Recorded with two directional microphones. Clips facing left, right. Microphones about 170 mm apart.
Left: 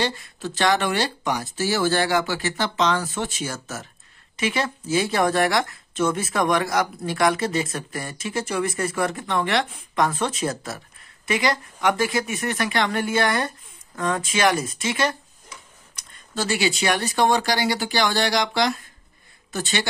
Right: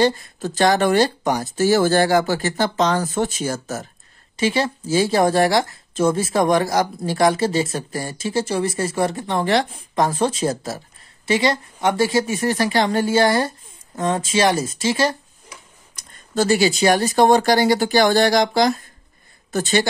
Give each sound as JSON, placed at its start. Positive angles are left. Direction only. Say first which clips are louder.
{"t": 0.0, "sound": "a woman's voice", "louder": "right 8 dB", "side_deg": -40}
{"t": 16.3, "sound": "speech", "louder": "right 7 dB", "side_deg": -40}